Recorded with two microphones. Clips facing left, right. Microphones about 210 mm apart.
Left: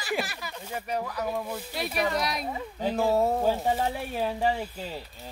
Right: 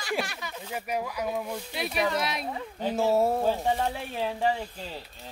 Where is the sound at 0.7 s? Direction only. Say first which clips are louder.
Even; 10° right (ahead or behind).